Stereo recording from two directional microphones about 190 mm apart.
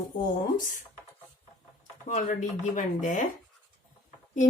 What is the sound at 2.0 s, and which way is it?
Speech, 40° left (ahead or behind).